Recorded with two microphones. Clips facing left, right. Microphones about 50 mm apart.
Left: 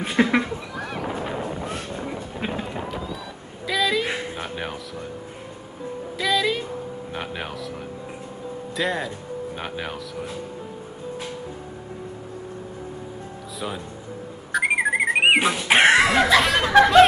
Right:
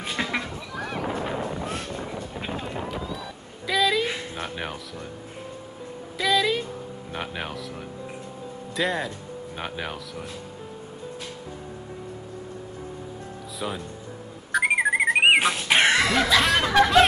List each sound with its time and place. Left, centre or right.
0.0 s a sound: centre
0.7 s a sound: centre
2.6 s run: centre
3.6 s a sound: centre
4.4 s music: centre
6.1 s music: centre
8.7 s snicker: centre
14.5 s alarm clock: centre
15.7 s dog: centre
16.3 s snicker: centre